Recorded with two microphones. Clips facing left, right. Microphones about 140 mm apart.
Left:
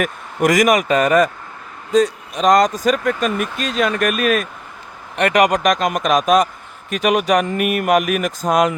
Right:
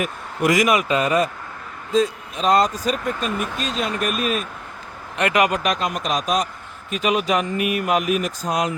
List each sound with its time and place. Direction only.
0.0 s speech: 45° left (ahead or behind)
1.9 s speech: 75° left (ahead or behind); by 3.2 s 90° left
3.8 s speech: 80° left
5.2 s speech: 40° left (ahead or behind)
5.8 s speech: 55° left (ahead or behind)
8.4 s speech: 50° left (ahead or behind)